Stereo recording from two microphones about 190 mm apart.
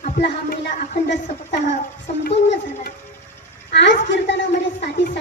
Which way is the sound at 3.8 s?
65° left (ahead or behind).